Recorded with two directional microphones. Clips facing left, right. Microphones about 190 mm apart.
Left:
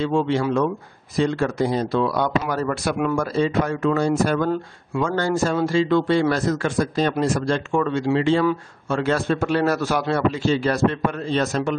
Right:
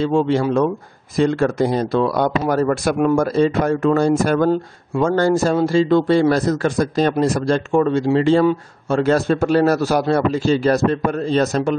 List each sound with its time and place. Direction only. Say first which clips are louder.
0.0 s speech: right 4 dB; 35° right (ahead or behind)
1.1 s speech: right 4 dB; 50° right (ahead or behind)